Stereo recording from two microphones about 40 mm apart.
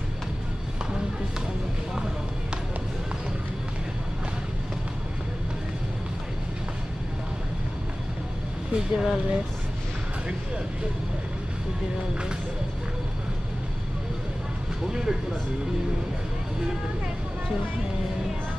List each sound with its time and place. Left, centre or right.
8.7 s speech: right
14.9 s speech: centre